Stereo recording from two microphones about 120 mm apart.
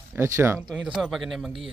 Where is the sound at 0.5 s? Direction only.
5° right (ahead or behind).